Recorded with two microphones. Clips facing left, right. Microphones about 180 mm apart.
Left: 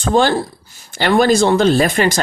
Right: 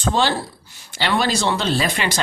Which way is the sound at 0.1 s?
50° left (ahead or behind).